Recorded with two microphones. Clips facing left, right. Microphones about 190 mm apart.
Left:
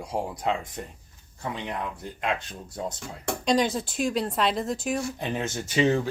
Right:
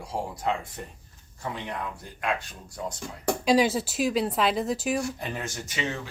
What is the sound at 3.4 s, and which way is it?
Speech, 5° right (ahead or behind).